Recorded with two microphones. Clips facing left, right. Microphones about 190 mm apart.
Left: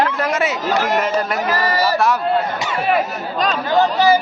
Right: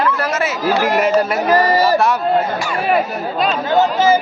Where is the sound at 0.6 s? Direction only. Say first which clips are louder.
Right 6 dB; 10° right (ahead or behind).